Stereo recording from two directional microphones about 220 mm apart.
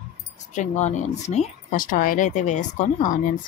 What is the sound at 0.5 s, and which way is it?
Speech, 35° left (ahead or behind).